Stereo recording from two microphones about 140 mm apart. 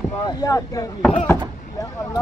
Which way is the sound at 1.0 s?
10° left (ahead or behind).